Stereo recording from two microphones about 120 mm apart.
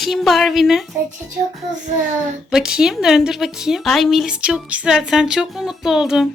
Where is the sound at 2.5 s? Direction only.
5° right (ahead or behind).